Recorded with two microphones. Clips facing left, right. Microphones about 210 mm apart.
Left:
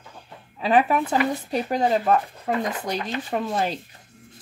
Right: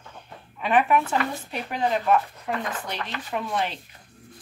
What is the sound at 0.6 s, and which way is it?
Speech, 35° left (ahead or behind).